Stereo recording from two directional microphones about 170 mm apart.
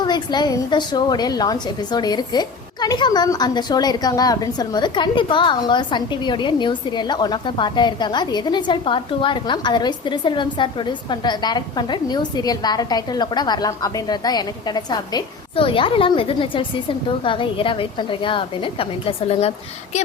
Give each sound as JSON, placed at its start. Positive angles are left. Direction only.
{"t": 0.0, "sound": "a woman's voice", "side_deg": 25}